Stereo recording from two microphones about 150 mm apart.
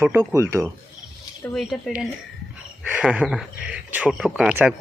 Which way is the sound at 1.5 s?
Centre (ahead or behind).